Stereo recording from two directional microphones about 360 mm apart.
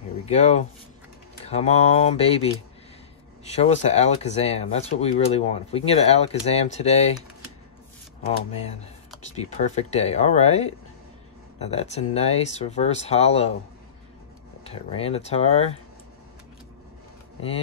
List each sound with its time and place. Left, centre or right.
0.3 s speech: centre
3.5 s speech: centre
9.3 s speech: centre
11.7 s speech: centre
14.6 s speech: centre